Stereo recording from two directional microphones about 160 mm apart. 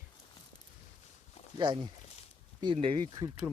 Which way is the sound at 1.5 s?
30° right (ahead or behind).